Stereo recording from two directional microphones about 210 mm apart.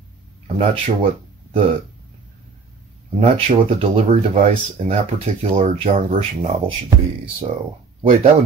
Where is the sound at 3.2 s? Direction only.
25° right (ahead or behind).